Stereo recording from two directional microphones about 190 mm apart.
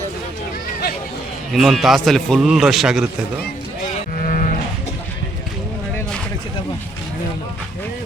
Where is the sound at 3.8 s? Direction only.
45° left (ahead or behind).